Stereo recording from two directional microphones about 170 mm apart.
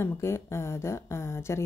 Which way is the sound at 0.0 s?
15° left (ahead or behind).